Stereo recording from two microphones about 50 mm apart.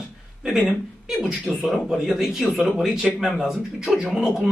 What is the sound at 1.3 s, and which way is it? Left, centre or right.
Speech, right.